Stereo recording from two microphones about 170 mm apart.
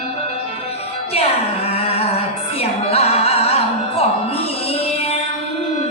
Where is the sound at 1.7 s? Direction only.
35° left (ahead or behind).